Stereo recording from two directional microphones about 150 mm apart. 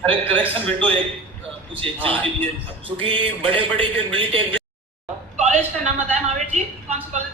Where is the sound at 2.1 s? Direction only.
10° left (ahead or behind).